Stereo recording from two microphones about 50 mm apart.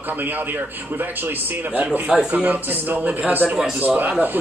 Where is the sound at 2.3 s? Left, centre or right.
Right.